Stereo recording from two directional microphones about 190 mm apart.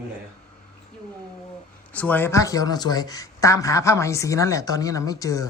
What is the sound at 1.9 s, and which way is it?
Speech, 10° left (ahead or behind).